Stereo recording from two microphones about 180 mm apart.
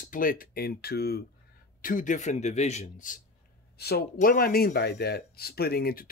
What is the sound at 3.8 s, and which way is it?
Speech, 60° left (ahead or behind).